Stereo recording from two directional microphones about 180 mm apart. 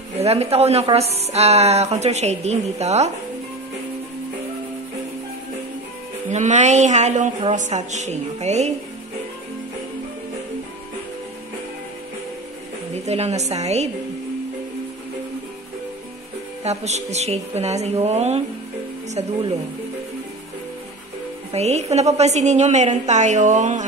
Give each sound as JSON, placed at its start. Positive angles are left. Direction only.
{"t": 0.2, "sound": "a woman's voice", "side_deg": -35}
{"t": 6.3, "sound": "a woman's voice", "side_deg": -40}
{"t": 12.9, "sound": "a woman's voice", "side_deg": -35}
{"t": 16.6, "sound": "a woman's voice", "side_deg": -40}
{"t": 21.5, "sound": "a woman's voice", "side_deg": -35}